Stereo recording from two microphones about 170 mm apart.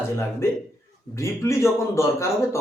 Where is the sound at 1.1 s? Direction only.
15° left (ahead or behind).